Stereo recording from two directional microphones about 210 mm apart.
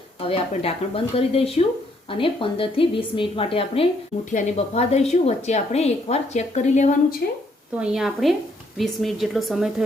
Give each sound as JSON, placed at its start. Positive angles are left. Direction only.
{"t": 0.2, "sound": "a woman's voice", "side_deg": 25}
{"t": 7.8, "sound": "speech", "side_deg": -5}